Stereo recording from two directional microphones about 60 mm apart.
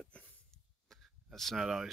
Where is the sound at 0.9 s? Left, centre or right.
Centre.